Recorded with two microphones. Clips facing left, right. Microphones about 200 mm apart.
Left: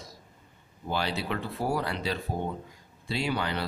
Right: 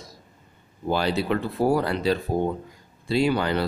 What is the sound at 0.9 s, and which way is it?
Speech, 45° right (ahead or behind).